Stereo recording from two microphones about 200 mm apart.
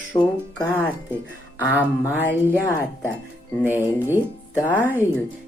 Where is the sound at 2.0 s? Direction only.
10° left (ahead or behind).